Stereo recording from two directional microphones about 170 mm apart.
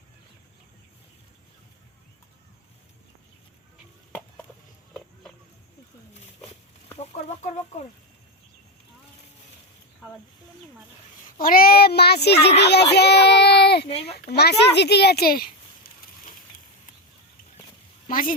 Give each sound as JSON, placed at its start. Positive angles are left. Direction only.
{"t": 7.0, "sound": "chicken", "side_deg": 40}
{"t": 11.3, "sound": "a child's voice", "side_deg": 60}
{"t": 13.9, "sound": "speech", "side_deg": 35}
{"t": 14.3, "sound": "speech", "side_deg": 75}
{"t": 18.1, "sound": "a woman's voice", "side_deg": 55}